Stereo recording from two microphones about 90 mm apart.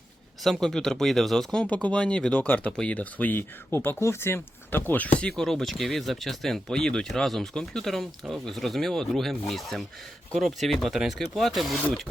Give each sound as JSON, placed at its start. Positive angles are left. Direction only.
{"t": 0.4, "sound": "speech", "side_deg": 5}
{"t": 1.6, "sound": "speech", "side_deg": 15}
{"t": 5.4, "sound": "speech", "side_deg": 5}